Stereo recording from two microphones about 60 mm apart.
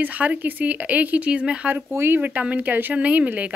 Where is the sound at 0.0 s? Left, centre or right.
Right.